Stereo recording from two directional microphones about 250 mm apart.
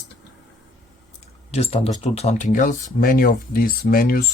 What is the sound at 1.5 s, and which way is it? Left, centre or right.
Speech, left.